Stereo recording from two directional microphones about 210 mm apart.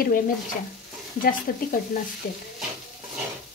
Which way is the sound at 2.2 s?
40° left (ahead or behind).